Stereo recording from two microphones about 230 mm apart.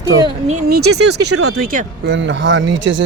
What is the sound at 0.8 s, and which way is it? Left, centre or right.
Speech, right.